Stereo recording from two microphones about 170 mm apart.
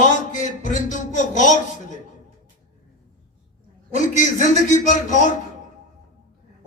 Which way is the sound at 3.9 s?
50° left (ahead or behind).